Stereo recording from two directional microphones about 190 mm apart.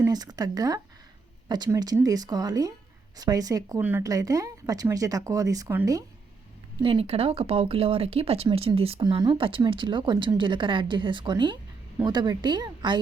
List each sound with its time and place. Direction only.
0.0 s speech: 20° right (ahead or behind)
6.8 s speech: 30° right (ahead or behind)